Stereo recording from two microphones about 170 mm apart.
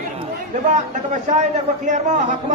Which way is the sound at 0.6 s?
45° right (ahead or behind).